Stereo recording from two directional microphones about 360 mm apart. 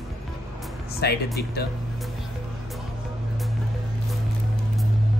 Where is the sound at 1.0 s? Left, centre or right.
Left.